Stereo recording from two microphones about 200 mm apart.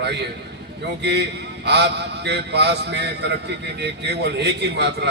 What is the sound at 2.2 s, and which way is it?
Speech, 55° right (ahead or behind).